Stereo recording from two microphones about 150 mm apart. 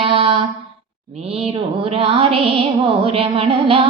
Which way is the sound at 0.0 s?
40° right (ahead or behind).